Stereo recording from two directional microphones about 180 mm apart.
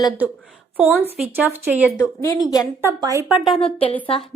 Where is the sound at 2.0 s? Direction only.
15° left (ahead or behind).